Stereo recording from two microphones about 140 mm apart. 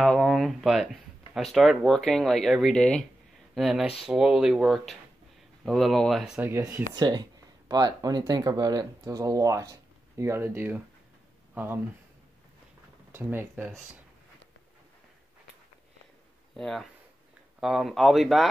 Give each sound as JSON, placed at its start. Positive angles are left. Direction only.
{"t": 0.0, "sound": "speech", "side_deg": 0}
{"t": 6.5, "sound": "speech", "side_deg": -20}
{"t": 6.9, "sound": "speech", "side_deg": -30}
{"t": 13.1, "sound": "speech", "side_deg": -15}
{"t": 16.5, "sound": "speech", "side_deg": 5}